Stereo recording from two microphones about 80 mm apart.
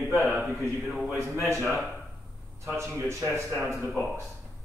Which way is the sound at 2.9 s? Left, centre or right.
Right.